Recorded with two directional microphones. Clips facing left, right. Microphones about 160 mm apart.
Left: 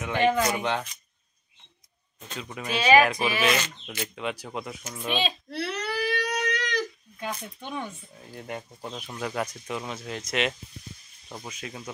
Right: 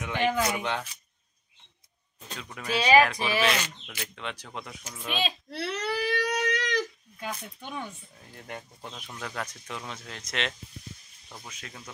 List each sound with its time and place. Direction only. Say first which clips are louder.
0.0 s speech: left 3 dB; centre (ahead or behind)
2.6 s speech: left 1 dB; 5° left (ahead or behind)
4.9 s speech: left 3 dB; centre (ahead or behind)
5.5 s baby cry: even; 25° right (ahead or behind)
7.2 s speech: left 2 dB; 5° right (ahead or behind); by 11.9 s 10° left (ahead or behind)